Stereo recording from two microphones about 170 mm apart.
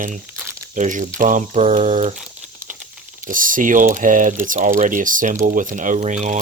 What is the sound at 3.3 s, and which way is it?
Speech, 55° right (ahead or behind).